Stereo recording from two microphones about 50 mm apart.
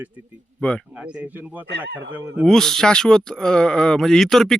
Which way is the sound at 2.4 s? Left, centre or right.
Centre.